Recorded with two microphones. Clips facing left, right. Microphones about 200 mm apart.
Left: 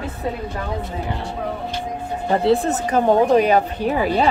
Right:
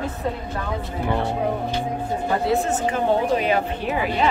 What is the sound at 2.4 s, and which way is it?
Speech, 35° left (ahead or behind).